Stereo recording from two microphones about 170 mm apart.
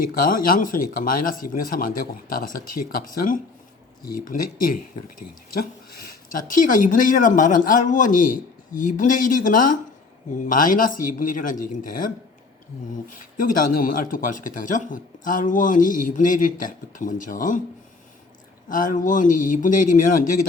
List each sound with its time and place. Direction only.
0.1 s speech: 55° left (ahead or behind)
6.5 s speech: 50° left (ahead or behind)
18.7 s speech: 55° left (ahead or behind)